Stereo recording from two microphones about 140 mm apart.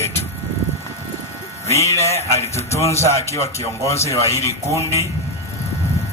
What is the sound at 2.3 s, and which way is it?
Music, 20° left (ahead or behind).